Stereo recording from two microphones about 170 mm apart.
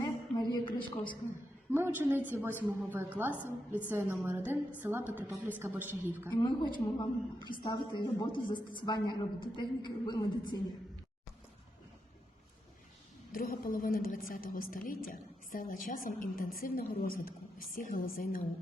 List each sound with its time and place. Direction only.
0.0 s a sound: 25° left (ahead or behind)
1.7 s a woman's voice: 10° right (ahead or behind)
6.3 s a woman's voice: 25° left (ahead or behind)
13.3 s a woman's voice: 55° left (ahead or behind)